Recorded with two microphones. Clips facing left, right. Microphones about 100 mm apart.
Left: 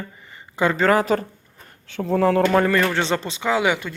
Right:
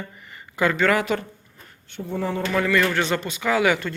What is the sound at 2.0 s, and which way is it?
Speech, 90° left.